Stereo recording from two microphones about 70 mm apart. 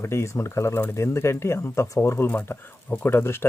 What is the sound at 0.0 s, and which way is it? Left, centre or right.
Speech, left.